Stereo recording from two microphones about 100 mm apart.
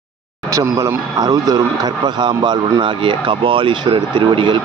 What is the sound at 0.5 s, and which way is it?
Speech, 30° right (ahead or behind).